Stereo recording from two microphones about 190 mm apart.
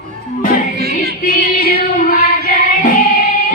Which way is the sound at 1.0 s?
45° left (ahead or behind).